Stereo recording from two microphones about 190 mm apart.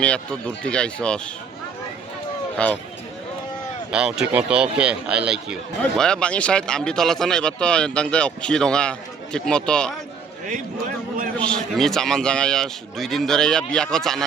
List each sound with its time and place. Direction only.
0.0 s speech: 5° left (ahead or behind)
2.6 s speech: 5° left (ahead or behind)
3.9 s speech: 5° right (ahead or behind)
10.5 s a man's voice: 45° right (ahead or behind)
11.3 s speech: 5° left (ahead or behind)